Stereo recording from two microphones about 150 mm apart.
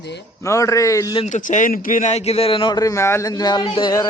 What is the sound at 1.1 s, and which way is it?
A man's voice, 50° left (ahead or behind).